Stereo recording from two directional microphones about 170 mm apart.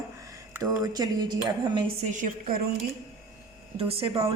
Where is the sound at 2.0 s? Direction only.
50° right (ahead or behind).